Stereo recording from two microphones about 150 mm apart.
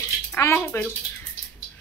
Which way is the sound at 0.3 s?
15° left (ahead or behind).